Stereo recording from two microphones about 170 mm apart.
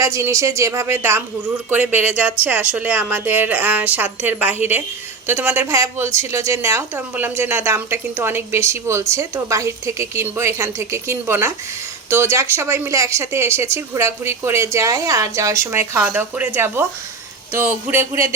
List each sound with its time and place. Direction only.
0.0 s a woman's voice: 15° right (ahead or behind)